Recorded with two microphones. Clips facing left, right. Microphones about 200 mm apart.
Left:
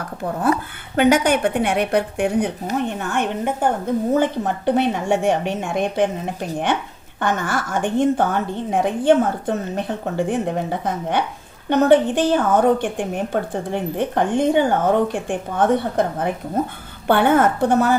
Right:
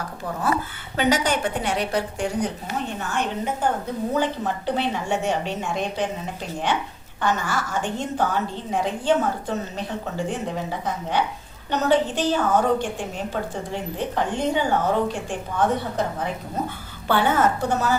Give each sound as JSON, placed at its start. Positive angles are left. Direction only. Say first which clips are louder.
{"t": 0.9, "sound": "a woman's voice", "louder": "left 6 dB", "side_deg": 55}
{"t": 7.2, "sound": "a woman's voice", "louder": "left 2 dB", "side_deg": 55}